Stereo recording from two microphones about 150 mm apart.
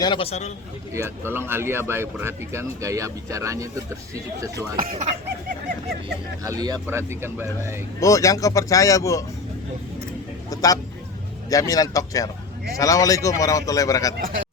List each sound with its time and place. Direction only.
0.0 s a man's voice: 35° left (ahead or behind)
0.9 s speech: 15° right (ahead or behind)
4.8 s speech: 70° right (ahead or behind)
6.4 s speech: 25° right (ahead or behind)
7.9 s a man's voice: 20° left (ahead or behind)
10.5 s a man's voice: 25° left (ahead or behind)